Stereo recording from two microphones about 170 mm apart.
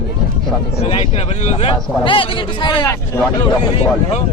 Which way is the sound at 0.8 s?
35° left (ahead or behind).